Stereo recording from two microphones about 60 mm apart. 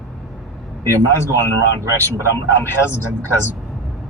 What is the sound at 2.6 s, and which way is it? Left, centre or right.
Speech, left.